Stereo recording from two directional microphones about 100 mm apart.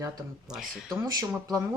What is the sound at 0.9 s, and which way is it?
Speech, 35° right (ahead or behind).